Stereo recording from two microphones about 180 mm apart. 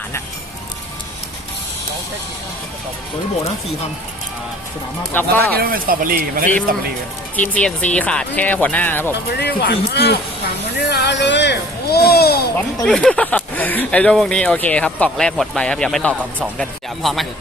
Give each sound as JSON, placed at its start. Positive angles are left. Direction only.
{"t": 5.1, "sound": "speech", "side_deg": 10}
{"t": 5.5, "sound": "speech", "side_deg": -55}
{"t": 7.3, "sound": "speech", "side_deg": 10}
{"t": 9.4, "sound": "speech", "side_deg": 65}
{"t": 12.8, "sound": "speech", "side_deg": 5}